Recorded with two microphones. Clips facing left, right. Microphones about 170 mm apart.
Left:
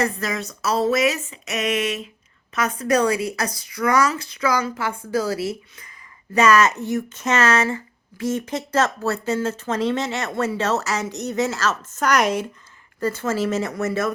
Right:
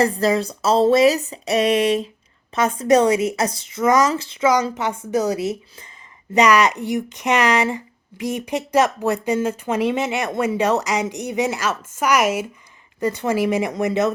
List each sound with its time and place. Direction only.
0.0 s a sound: 30° right (ahead or behind)
2.6 s speech: 25° right (ahead or behind); by 12.5 s 5° right (ahead or behind)
13.0 s speech: 15° right (ahead or behind)